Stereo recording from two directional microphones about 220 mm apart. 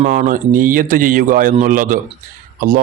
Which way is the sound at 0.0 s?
35° right (ahead or behind).